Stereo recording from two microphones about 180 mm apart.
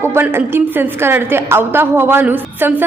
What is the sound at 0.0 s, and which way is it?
A woman's voice, 15° right (ahead or behind).